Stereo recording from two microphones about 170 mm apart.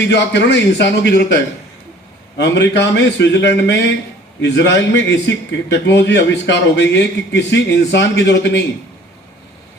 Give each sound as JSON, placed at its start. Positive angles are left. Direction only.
{"t": 0.0, "sound": "a man's voice", "side_deg": 90}
{"t": 2.4, "sound": "a man's voice", "side_deg": 90}